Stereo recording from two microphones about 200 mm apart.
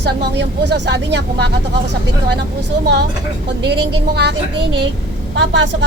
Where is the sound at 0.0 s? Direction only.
60° right (ahead or behind).